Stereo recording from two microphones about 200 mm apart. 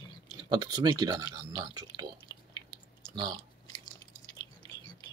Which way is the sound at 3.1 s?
20° right (ahead or behind).